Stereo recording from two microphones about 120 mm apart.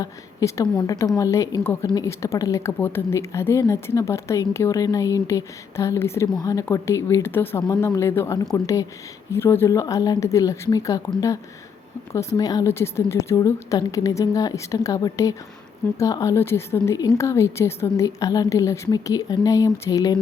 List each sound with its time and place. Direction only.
0.0 s a woman's voice: 30° left (ahead or behind)
12.4 s a woman's voice: 30° left (ahead or behind)